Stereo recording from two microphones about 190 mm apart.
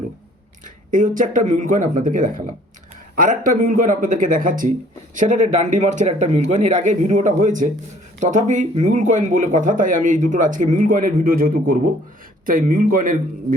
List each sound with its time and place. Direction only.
0.6 s speech: 45° right (ahead or behind)